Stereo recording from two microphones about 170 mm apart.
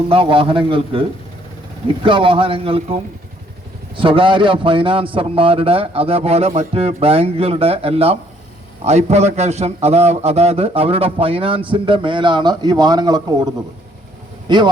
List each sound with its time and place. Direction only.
0.1 s a man's voice: 30° right (ahead or behind)
2.0 s a man's voice: 30° right (ahead or behind)